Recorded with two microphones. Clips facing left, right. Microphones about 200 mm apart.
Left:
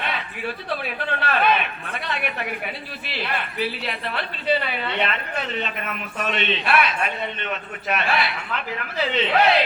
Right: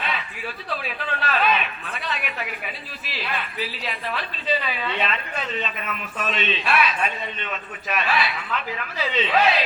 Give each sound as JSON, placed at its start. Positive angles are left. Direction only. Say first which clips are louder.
{"t": 0.0, "sound": "a sound", "louder": "left 2 dB", "side_deg": 55}
{"t": 1.2, "sound": "a woman's voice", "louder": "left 2 dB", "side_deg": 55}
{"t": 3.1, "sound": "a woman's voice", "louder": "left 2 dB", "side_deg": 60}